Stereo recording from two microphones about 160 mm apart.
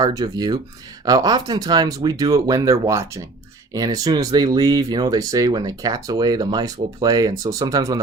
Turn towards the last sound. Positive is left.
turn(degrees=-25)  # may be behind; listen again after turning